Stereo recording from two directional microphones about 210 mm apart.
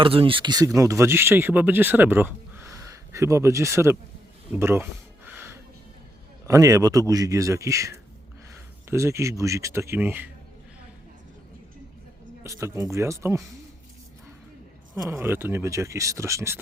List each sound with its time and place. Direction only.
0.0 s speech: 25° right (ahead or behind)
4.5 s a sound: 10° right (ahead or behind)
6.5 s speech: 15° right (ahead or behind)
12.4 s speech: 15° right (ahead or behind)
14.9 s speech: 10° right (ahead or behind)